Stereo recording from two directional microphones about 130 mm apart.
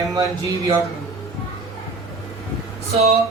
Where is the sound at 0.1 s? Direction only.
25° right (ahead or behind).